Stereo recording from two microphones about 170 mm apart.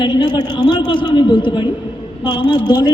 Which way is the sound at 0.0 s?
25° left (ahead or behind).